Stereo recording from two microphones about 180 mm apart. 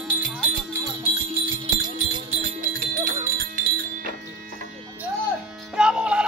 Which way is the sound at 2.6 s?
45° right (ahead or behind).